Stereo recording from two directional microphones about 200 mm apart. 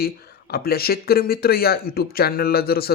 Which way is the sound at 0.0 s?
50° left (ahead or behind).